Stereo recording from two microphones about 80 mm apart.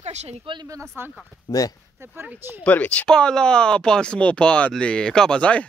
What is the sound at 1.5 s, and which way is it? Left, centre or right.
Speech, left.